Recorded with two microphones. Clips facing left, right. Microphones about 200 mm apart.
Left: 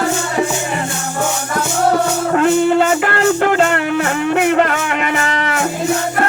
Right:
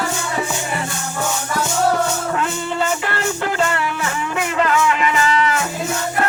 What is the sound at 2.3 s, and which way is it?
Music, 60° left (ahead or behind).